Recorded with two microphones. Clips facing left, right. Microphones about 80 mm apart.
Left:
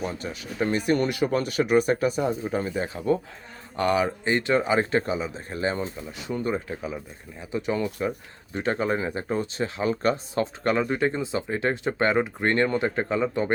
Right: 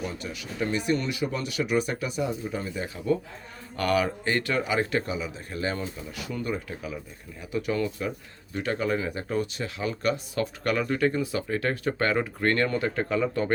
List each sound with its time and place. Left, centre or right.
0.0 s speech: left
3.8 s speech: left